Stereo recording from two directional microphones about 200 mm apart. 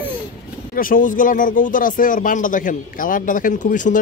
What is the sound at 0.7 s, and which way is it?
Speech, 45° left (ahead or behind).